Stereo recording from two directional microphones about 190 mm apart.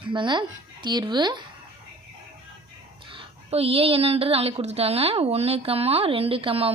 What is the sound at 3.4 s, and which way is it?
A woman's voice, 30° right (ahead or behind).